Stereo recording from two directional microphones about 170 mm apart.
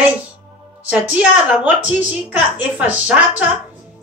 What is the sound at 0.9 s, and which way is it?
A woman's voice, 10° right (ahead or behind).